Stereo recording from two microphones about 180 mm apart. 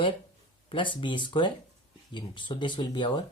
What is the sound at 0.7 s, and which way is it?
Speech, 25° left (ahead or behind).